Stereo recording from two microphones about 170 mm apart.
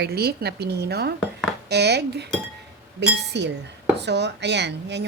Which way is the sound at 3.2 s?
90° right.